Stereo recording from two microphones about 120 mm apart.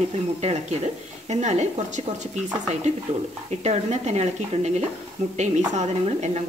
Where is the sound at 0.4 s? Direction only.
70° right (ahead or behind).